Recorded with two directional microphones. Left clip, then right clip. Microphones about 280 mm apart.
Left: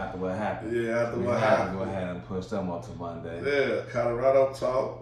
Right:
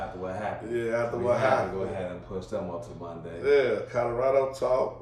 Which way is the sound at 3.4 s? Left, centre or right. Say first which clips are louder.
Right 3 dB; centre.